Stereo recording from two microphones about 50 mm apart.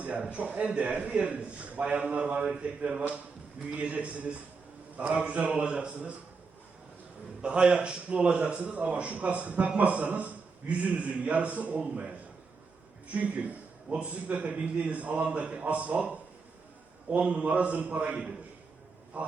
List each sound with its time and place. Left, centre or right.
0.0 s a man's voice: right
7.4 s a man's voice: centre
11.8 s a man's voice: centre
13.1 s a man's voice: right